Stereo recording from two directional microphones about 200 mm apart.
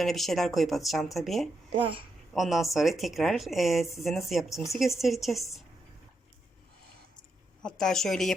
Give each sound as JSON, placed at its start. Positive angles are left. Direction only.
{"t": 0.0, "sound": "speech", "side_deg": 0}
{"t": 1.7, "sound": "speech", "side_deg": -25}
{"t": 2.3, "sound": "speech", "side_deg": 0}
{"t": 7.6, "sound": "speech", "side_deg": 5}